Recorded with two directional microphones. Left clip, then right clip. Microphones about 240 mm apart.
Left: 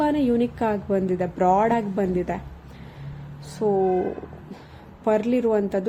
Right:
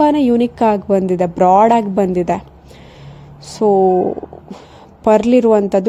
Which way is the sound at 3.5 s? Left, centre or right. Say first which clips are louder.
Right 10 dB; right.